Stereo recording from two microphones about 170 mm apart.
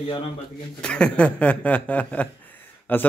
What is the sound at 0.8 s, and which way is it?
Speech, 5° left (ahead or behind).